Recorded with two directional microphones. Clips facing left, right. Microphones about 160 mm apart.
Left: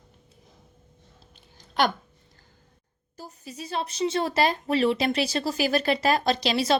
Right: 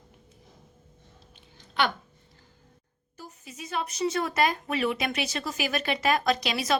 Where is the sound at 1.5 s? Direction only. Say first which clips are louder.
Left 3 dB; 40° left (ahead or behind).